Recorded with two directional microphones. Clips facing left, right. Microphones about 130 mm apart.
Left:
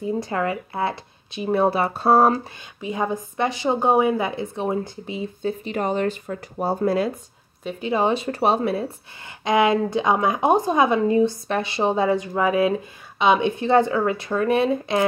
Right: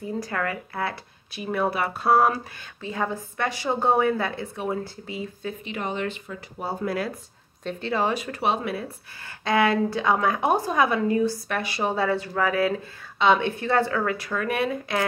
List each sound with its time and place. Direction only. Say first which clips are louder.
0.0 s a woman's voice: left 5 dB; 20° left (ahead or behind)
2.8 s a woman's voice: left 4 dB; 15° left (ahead or behind); by 7.0 s 40° left (ahead or behind)
7.6 s a woman's voice: left 4 dB; 15° left (ahead or behind)
8.4 s speech: left 6 dB; 35° left (ahead or behind)
9.4 s a woman's voice: left 3 dB; 20° left (ahead or behind)